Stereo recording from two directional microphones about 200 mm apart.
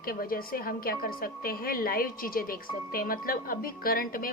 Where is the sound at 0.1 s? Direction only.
45° left (ahead or behind).